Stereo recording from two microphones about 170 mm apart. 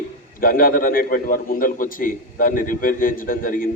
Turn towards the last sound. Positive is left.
turn(degrees=55)  # may be behind; listen again after turning